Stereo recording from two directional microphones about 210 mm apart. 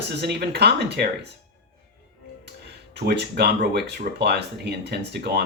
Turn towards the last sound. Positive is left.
turn(degrees=-50)  # may be behind; listen again after turning